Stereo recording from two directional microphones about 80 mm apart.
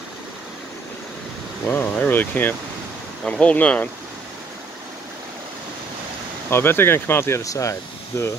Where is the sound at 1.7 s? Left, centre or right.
Left.